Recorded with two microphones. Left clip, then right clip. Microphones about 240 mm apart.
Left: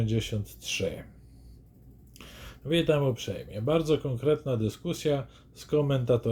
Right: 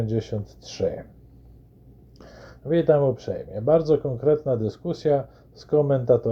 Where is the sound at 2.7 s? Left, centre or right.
Centre.